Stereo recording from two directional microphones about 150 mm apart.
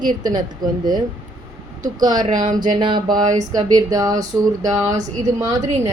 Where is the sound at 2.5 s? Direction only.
60° right (ahead or behind).